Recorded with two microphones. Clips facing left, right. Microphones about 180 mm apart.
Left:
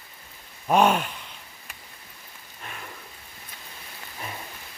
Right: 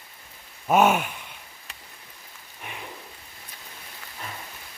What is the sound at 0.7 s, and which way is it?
Speech, 5° right (ahead or behind).